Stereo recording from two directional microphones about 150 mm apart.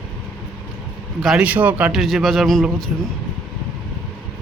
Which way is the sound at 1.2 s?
5° right (ahead or behind).